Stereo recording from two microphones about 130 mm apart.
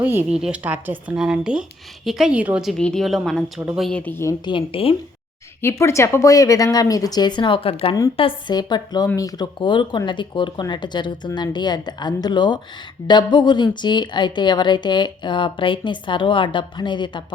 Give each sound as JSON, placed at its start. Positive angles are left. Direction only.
{"t": 0.0, "sound": "a woman's voice", "side_deg": -15}
{"t": 4.4, "sound": "speech", "side_deg": 40}
{"t": 5.6, "sound": "a woman's voice", "side_deg": 20}